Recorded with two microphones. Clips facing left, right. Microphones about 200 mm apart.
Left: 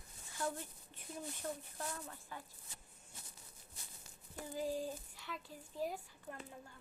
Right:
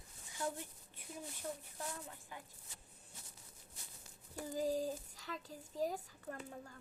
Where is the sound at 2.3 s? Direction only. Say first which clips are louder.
Left 2 dB; 15° right (ahead or behind).